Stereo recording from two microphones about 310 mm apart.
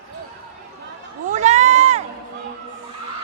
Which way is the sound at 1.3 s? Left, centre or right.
Right.